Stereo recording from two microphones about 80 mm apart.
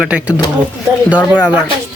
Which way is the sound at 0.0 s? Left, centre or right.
Centre.